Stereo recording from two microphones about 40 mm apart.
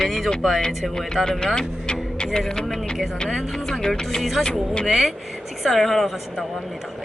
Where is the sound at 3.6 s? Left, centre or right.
Centre.